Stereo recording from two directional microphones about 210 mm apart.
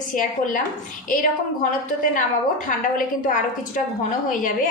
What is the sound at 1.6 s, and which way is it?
A woman's voice, 40° left (ahead or behind).